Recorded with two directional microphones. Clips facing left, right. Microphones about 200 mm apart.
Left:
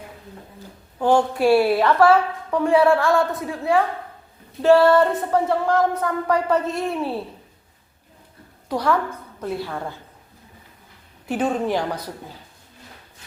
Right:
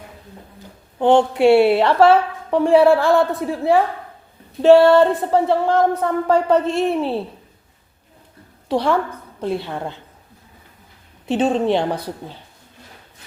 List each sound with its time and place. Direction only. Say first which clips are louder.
0.9 s a woman's voice: right 4 dB; 25° right (ahead or behind)
8.7 s a woman's voice: right 3 dB; 25° right (ahead or behind)
11.3 s a woman's voice: right 5 dB; 25° right (ahead or behind)